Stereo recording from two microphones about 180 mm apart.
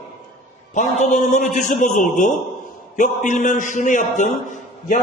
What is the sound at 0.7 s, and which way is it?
A man's voice, 40° left (ahead or behind).